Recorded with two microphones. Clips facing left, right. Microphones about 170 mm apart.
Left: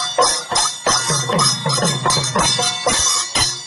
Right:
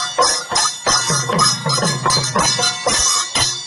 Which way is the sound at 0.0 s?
30° left (ahead or behind).